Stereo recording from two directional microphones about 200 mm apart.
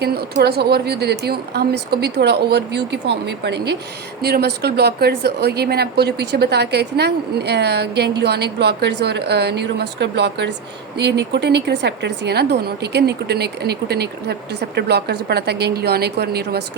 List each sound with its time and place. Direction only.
0.0 s a woman's voice: 55° right (ahead or behind)